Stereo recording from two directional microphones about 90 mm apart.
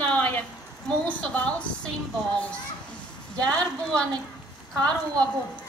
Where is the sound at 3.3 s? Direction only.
10° left (ahead or behind).